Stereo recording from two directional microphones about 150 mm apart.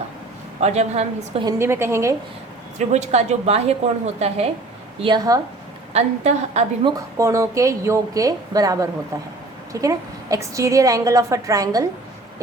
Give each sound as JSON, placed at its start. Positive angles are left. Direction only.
{"t": 0.6, "sound": "a woman's voice", "side_deg": -45}
{"t": 1.5, "sound": "a woman's voice", "side_deg": -15}
{"t": 2.7, "sound": "a woman's voice", "side_deg": -50}
{"t": 5.0, "sound": "a woman's voice", "side_deg": -25}
{"t": 5.9, "sound": "a woman's voice", "side_deg": -50}
{"t": 6.8, "sound": "a woman's voice", "side_deg": -20}